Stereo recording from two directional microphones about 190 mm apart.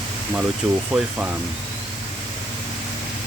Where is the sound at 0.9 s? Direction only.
5° right (ahead or behind).